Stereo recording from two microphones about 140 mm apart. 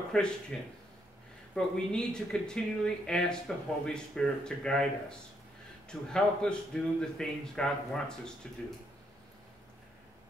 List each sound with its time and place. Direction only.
0.1 s speech: 5° left (ahead or behind)
5.9 s speech: 5° left (ahead or behind)